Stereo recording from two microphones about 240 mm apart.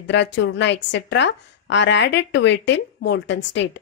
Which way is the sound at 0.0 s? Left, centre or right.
Left.